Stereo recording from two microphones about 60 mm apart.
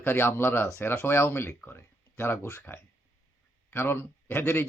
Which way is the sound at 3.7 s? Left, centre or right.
Left.